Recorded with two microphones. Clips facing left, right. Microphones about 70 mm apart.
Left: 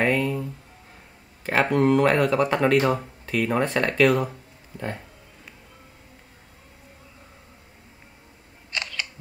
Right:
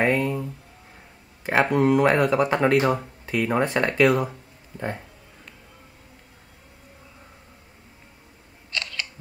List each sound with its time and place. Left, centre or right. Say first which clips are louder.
0.0 s a sound: right 1 dB; right
1.4 s speech: right 1 dB; centre
4.7 s speech: right 2 dB; centre